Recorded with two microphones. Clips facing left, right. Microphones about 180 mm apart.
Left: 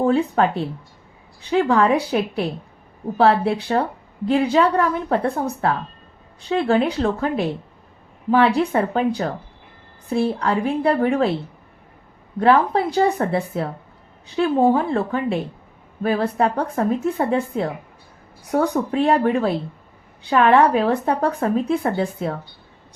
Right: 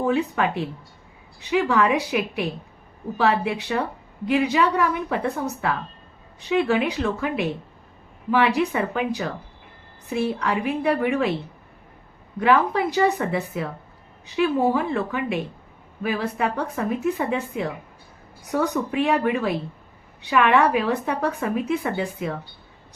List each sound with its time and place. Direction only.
0.0 s speech: 35° left (ahead or behind)
1.7 s a woman's voice: 35° left (ahead or behind)
12.4 s a woman's voice: 30° left (ahead or behind)